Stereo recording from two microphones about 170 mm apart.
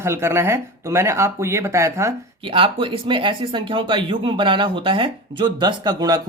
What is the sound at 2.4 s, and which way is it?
Speech, 30° right (ahead or behind).